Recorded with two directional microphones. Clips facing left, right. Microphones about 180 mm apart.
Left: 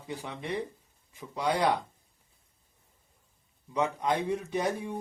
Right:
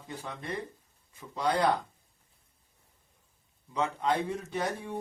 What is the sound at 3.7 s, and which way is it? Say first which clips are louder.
Speech: left 1 dB; 15° left (ahead or behind).